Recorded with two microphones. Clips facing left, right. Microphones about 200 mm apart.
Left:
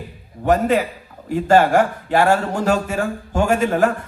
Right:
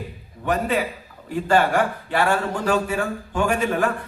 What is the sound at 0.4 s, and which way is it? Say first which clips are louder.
A man's voice: left 6 dB; 40° left (ahead or behind).